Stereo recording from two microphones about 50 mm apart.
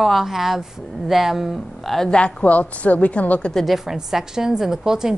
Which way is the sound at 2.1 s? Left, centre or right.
Centre.